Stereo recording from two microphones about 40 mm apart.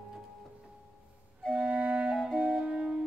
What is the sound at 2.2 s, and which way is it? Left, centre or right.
Music, centre.